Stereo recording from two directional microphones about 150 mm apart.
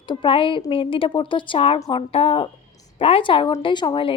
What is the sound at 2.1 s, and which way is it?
A woman's voice, 40° left (ahead or behind).